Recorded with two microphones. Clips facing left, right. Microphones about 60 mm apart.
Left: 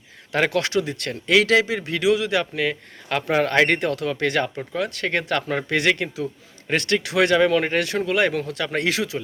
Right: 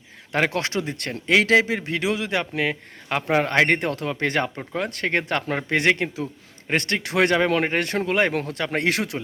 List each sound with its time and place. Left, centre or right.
0.3 s a man's voice: right